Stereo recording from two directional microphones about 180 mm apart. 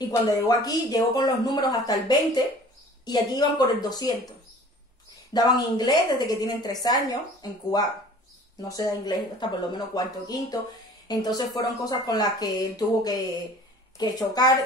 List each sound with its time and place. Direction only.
0.1 s speech: 20° left (ahead or behind)
5.3 s speech: 20° left (ahead or behind)